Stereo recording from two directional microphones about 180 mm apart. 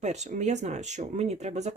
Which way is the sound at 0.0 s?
40° right (ahead or behind).